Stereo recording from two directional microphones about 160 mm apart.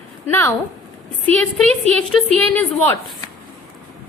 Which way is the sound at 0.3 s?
15° left (ahead or behind).